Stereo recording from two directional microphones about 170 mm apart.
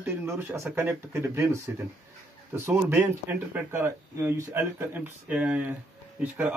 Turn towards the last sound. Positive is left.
turn(degrees=-10)  # may be behind; listen again after turning